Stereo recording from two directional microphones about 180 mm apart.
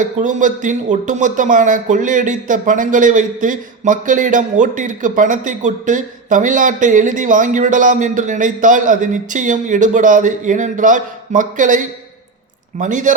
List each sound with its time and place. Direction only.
0.0 s speech: 45° right (ahead or behind)